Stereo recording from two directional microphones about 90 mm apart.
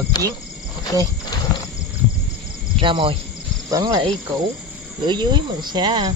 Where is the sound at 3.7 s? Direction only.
50° right (ahead or behind).